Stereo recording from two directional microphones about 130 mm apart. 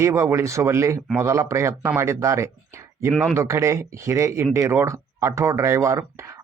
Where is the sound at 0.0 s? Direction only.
20° right (ahead or behind).